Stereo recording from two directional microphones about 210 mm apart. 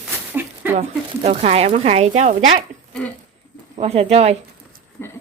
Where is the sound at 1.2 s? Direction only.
30° right (ahead or behind).